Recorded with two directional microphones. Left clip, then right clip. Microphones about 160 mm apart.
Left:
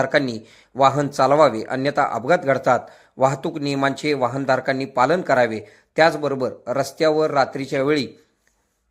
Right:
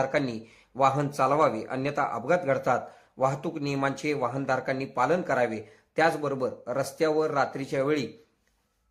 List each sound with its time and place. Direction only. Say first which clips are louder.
0.0 s speech: left 7 dB; 30° left (ahead or behind)